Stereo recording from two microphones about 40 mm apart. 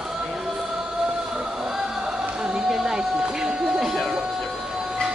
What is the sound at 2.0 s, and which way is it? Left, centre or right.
Music, right.